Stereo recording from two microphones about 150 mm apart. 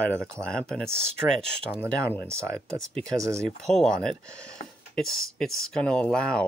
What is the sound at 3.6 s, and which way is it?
Speech, 5° left (ahead or behind).